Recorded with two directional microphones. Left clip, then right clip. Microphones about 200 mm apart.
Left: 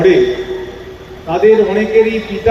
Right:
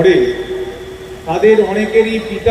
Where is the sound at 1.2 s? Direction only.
45° left (ahead or behind).